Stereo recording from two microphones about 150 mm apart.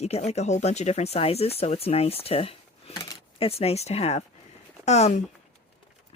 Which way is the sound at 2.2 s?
40° left (ahead or behind).